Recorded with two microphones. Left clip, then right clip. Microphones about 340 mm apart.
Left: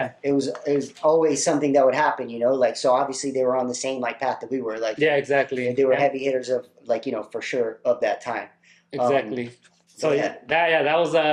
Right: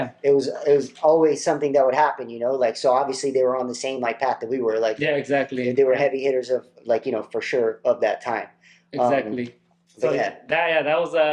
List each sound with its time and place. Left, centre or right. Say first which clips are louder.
0.2 s speech: right 9 dB; right
4.9 s speech: left 2 dB; left
5.7 s speech: right 1 dB; right
8.9 s speech: right 1 dB; left
10.5 s a man's voice: left 1 dB; left